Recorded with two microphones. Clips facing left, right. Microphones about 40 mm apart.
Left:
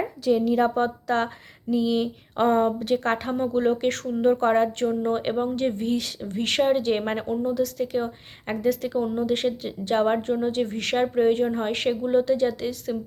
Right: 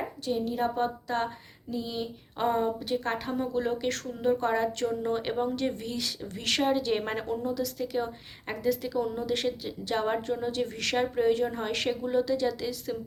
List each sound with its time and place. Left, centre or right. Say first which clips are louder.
0.3 s a woman's voice: left 9 dB; left
3.3 s speech: left 7 dB; left
4.9 s a woman's voice: left 5 dB; left
6.3 s a woman's voice: left 5 dB; left